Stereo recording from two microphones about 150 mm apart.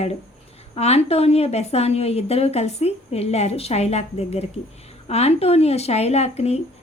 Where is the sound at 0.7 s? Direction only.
45° left (ahead or behind).